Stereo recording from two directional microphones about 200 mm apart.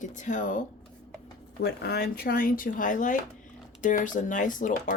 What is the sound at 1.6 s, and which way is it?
Speech, 50° left (ahead or behind).